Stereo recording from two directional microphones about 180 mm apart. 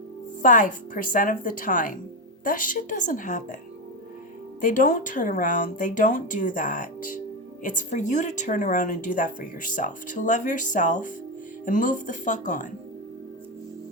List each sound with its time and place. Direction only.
0.4 s speech: 45° left (ahead or behind)
4.6 s speech: 50° left (ahead or behind)